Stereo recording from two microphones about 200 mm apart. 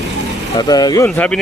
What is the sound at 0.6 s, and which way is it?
Speech, 20° left (ahead or behind).